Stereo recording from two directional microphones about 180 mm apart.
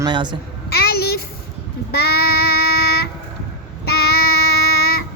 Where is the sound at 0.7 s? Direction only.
60° left (ahead or behind).